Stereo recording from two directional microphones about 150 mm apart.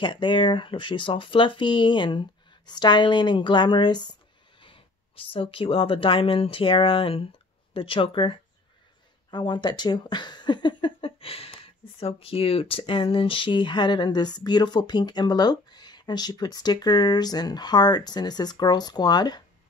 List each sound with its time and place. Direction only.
0.0 s speech: 30° left (ahead or behind)